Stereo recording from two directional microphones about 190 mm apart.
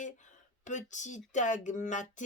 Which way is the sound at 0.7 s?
40° left (ahead or behind).